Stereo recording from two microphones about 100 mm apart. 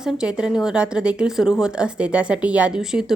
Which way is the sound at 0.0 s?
5° right (ahead or behind).